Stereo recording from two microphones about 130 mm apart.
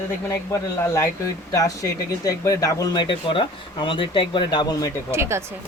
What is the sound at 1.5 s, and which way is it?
Speech, 25° left (ahead or behind).